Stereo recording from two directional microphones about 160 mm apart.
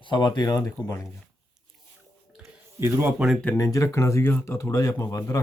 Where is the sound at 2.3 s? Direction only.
15° right (ahead or behind).